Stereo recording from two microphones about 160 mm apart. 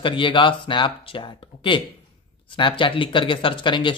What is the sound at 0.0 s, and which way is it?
Speech, 30° left (ahead or behind).